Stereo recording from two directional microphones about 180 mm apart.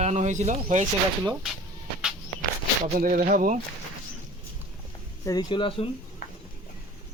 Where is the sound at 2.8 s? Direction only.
45° right (ahead or behind).